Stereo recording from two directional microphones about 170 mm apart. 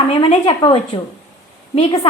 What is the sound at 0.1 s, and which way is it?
A woman's voice, 35° left (ahead or behind).